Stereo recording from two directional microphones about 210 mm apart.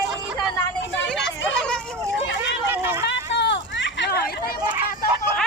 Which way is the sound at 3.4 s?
55° left (ahead or behind).